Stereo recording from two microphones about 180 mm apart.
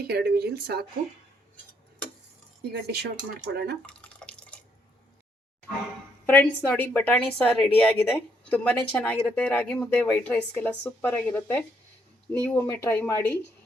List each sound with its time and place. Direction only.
0.1 s speech: 60° right (ahead or behind)
2.7 s speech: 65° right (ahead or behind)
3.8 s drip: 5° left (ahead or behind)
6.2 s speech: 10° left (ahead or behind)